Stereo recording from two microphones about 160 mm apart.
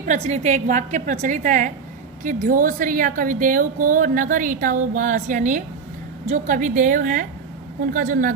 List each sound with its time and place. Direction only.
0.0 s a woman's voice: 45° right (ahead or behind)